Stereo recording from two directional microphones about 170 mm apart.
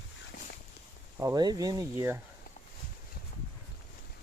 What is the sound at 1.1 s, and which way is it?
Speech, 20° right (ahead or behind).